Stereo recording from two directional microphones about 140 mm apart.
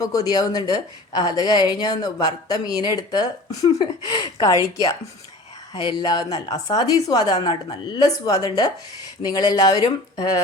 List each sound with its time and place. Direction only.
0.0 s speech: 25° left (ahead or behind)